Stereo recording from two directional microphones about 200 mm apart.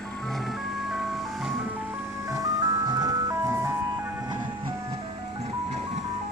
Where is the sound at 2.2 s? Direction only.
15° right (ahead or behind).